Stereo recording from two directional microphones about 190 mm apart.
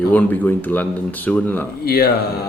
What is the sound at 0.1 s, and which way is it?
Speech, 10° left (ahead or behind).